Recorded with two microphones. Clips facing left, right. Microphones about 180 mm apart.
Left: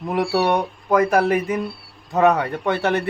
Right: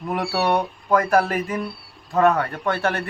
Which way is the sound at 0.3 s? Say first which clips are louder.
Even; 15° left (ahead or behind).